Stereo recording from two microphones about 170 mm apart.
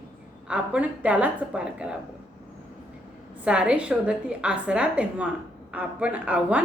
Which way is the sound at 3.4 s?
5° right (ahead or behind).